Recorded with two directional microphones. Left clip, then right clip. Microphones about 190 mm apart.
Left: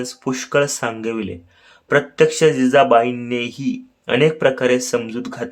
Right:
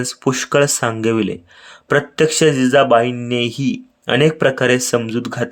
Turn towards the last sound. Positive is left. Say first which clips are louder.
# right 4 dB
turn(degrees=-20)  # may be behind; listen again after turning